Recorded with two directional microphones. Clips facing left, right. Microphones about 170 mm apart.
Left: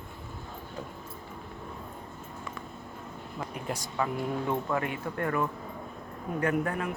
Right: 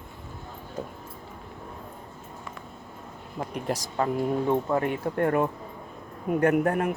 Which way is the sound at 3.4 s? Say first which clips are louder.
Right 5 dB; 40° right (ahead or behind).